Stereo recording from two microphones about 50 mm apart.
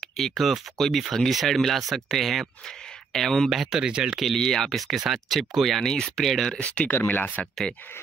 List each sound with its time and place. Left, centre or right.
0.2 s speech: centre
3.4 s speech: centre
4.1 s speech: centre
6.5 s speech: left
7.1 s speech: left